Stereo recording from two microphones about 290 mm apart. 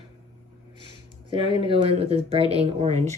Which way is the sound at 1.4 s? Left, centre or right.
Centre.